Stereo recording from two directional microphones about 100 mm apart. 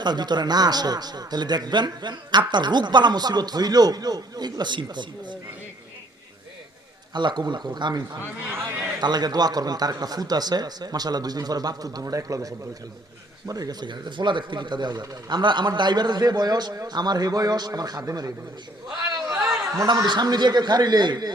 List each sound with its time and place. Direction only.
0.0 s speech: 45° right (ahead or behind)
7.1 s speech: 50° right (ahead or behind)
18.9 s a sound: 40° right (ahead or behind)
20.1 s speech: 45° right (ahead or behind)